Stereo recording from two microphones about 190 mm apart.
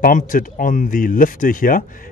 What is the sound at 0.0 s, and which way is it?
Speech, 45° left (ahead or behind).